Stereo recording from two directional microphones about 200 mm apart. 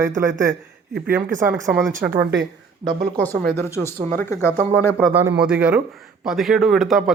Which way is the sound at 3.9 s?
10° left (ahead or behind).